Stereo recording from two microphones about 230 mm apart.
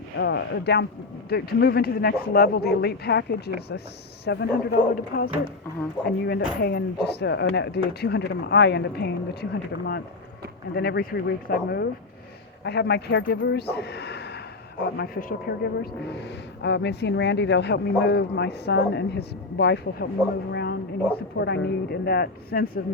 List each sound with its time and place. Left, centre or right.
0.2 s speech: left
20.5 s a sound: left
21.3 s speech: left